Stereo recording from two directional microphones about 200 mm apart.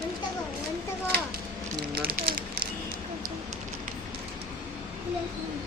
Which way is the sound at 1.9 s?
50° right (ahead or behind).